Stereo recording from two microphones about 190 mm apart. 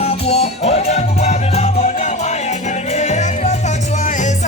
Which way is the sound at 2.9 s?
35° left (ahead or behind).